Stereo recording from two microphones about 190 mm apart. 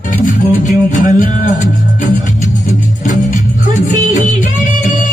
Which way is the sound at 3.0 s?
40° left (ahead or behind).